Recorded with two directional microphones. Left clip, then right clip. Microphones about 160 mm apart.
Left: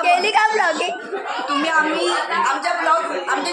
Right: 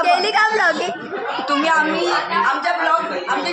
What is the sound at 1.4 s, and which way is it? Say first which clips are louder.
Speech: right 2 dB; 80° right.